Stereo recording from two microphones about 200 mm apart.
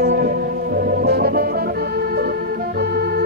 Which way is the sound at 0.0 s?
50° right (ahead or behind).